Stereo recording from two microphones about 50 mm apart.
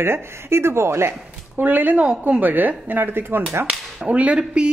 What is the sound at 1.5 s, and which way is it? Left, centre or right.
Speech, right.